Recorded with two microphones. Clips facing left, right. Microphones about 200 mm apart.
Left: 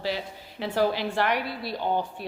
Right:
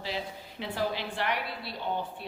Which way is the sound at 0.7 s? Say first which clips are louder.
Left 8 dB; 75° left (ahead or behind).